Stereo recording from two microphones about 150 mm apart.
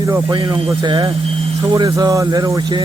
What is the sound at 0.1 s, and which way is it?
Speech, 30° right (ahead or behind).